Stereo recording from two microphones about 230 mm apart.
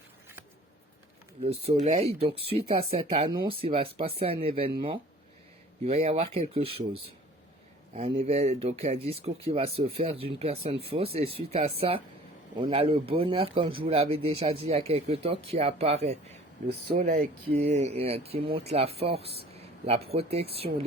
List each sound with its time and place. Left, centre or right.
1.4 s speech: right
16.6 s speech: right
17.7 s speech: right